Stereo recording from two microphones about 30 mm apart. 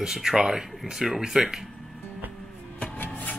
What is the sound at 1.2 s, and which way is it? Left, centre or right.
Speech, right.